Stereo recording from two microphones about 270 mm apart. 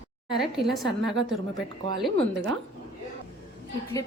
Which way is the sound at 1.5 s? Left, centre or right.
Centre.